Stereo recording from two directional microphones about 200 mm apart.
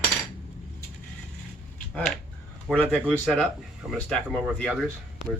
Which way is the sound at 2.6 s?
5° left (ahead or behind).